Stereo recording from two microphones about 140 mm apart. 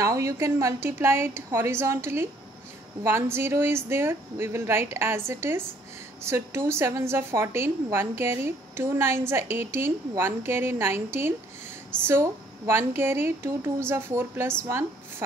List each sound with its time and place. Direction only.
0.0 s a woman's voice: 25° right (ahead or behind)